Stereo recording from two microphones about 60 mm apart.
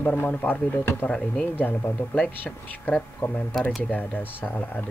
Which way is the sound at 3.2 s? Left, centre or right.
Left.